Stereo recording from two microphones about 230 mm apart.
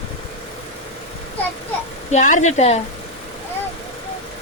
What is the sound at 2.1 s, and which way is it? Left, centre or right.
Speech, left.